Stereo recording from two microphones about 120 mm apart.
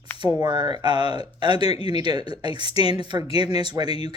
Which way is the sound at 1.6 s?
55° left (ahead or behind).